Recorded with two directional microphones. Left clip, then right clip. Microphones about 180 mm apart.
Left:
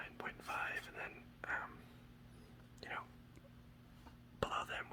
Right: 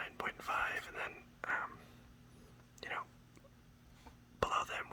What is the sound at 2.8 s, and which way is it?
Whispering, 25° right (ahead or behind).